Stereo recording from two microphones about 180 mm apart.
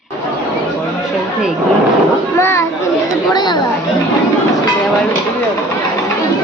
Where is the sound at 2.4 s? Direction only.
15° left (ahead or behind).